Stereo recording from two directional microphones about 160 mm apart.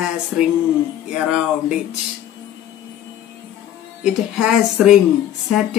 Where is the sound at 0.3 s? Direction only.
5° right (ahead or behind).